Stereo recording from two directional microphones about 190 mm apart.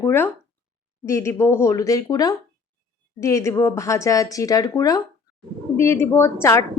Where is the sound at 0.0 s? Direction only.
10° left (ahead or behind).